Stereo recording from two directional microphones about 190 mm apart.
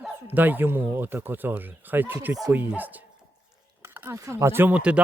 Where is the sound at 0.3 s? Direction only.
10° right (ahead or behind).